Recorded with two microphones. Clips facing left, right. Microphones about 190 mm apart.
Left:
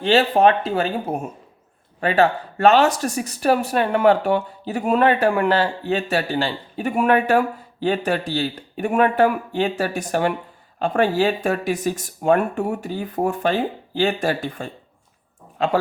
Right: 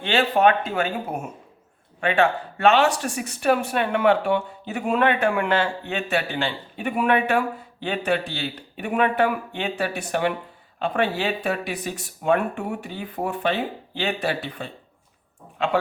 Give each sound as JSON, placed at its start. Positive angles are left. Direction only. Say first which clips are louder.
{"t": 0.0, "sound": "speech", "louder": "left 4 dB", "side_deg": 40}